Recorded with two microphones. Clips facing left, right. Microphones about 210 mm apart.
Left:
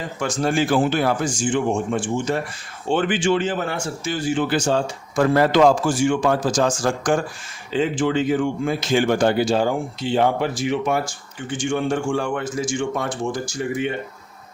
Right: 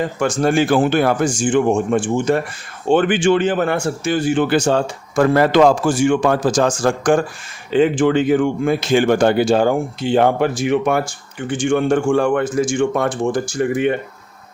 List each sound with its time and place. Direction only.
0.2 s speech: 55° right (ahead or behind)